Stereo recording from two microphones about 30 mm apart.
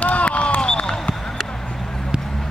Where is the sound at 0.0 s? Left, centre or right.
Left.